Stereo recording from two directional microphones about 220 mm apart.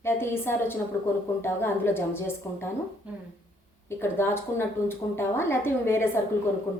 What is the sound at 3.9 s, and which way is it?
A woman's voice, 10° left (ahead or behind).